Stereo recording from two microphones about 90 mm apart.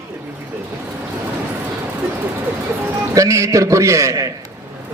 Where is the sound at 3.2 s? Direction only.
35° right (ahead or behind).